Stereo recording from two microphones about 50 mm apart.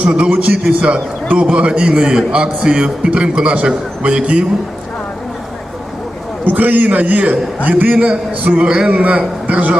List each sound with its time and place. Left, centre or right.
0.0 s a man's voice: right
6.4 s a man's voice: right; by 8.9 s centre
8.9 s a man's voice: right